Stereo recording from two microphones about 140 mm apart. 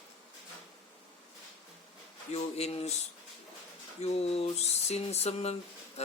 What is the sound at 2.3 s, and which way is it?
Speech, 50° left (ahead or behind).